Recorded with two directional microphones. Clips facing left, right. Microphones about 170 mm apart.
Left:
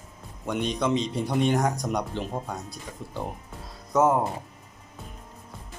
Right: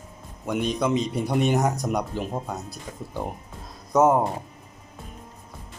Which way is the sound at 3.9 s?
20° right (ahead or behind).